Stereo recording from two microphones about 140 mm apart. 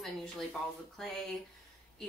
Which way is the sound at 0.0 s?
Centre (ahead or behind).